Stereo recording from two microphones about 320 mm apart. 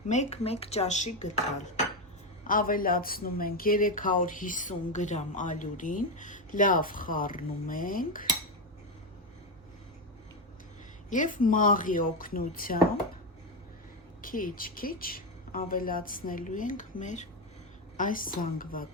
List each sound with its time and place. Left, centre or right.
0.1 s speech: left
2.5 s speech: left
11.1 s speech: left
14.2 s speech: left